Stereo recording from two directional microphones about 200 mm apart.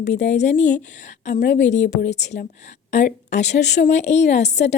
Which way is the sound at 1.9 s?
35° left (ahead or behind).